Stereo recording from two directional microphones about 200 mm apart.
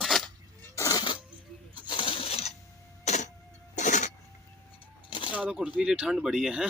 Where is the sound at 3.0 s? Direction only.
35° left (ahead or behind).